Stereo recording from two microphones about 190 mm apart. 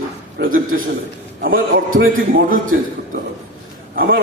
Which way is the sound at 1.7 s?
50° right (ahead or behind).